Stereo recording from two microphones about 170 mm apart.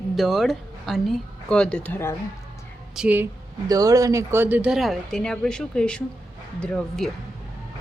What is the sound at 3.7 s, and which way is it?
Speech, 20° right (ahead or behind).